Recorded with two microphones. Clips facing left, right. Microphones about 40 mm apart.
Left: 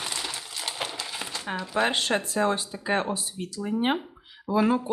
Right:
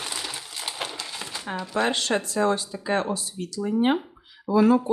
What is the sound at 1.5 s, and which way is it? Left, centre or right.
Speech, centre.